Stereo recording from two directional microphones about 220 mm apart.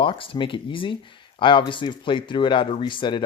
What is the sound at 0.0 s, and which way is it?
Speech, 25° left (ahead or behind).